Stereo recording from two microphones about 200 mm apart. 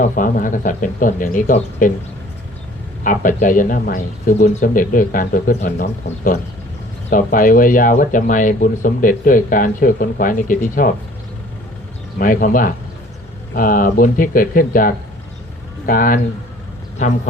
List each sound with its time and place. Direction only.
0.0 s speech: 40° left (ahead or behind)
3.0 s speech: 40° left (ahead or behind)
5.7 s speech: 55° left (ahead or behind)
7.1 s speech: 45° left (ahead or behind)
12.2 s speech: 45° left (ahead or behind)